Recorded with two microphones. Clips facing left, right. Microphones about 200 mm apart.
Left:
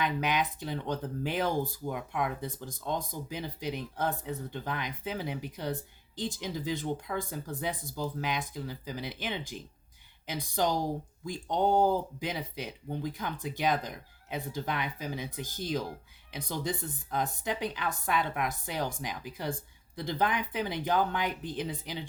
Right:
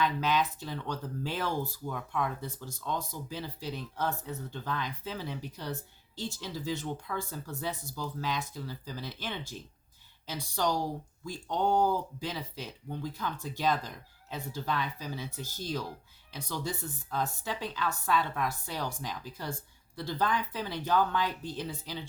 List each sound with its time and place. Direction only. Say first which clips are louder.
0.0 s a woman's voice: right 1 dB; 15° left (ahead or behind)